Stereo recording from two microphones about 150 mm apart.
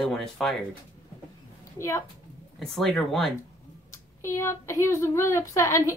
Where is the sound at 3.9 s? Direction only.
20° left (ahead or behind).